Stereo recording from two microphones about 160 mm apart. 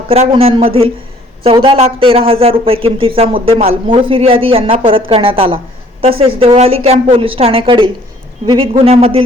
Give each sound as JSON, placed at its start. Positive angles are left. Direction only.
{"t": 0.1, "sound": "speech", "side_deg": -40}